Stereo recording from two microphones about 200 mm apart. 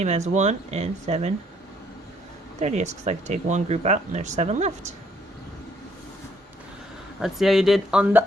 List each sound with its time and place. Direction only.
0.0 s speech: 35° right (ahead or behind)
2.6 s speech: 35° right (ahead or behind)
7.2 s speech: centre (ahead or behind)